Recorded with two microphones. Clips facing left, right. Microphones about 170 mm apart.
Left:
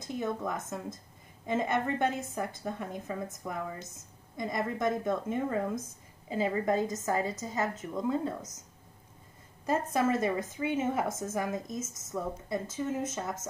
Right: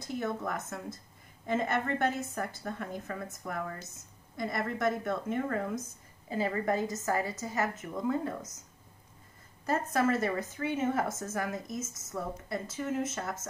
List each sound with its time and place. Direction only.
0.2 s a woman's voice: 15° left (ahead or behind)
9.7 s a woman's voice: 15° left (ahead or behind)